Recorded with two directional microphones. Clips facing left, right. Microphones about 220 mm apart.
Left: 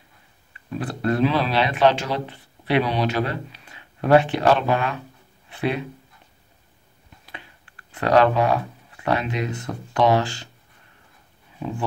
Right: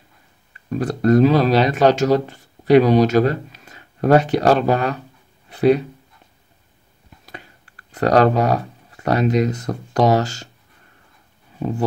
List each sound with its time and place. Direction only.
0.5 s speech: 40° right (ahead or behind)
7.2 s speech: 40° right (ahead or behind)